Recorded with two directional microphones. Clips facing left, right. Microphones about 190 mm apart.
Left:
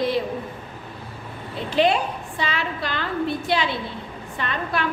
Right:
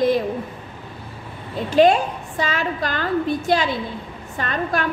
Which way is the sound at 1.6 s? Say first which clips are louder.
Right 5 dB; 45° right (ahead or behind).